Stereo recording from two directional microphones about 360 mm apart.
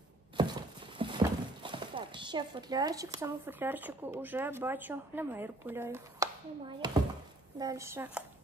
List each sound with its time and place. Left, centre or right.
0.4 s a woman's voice: centre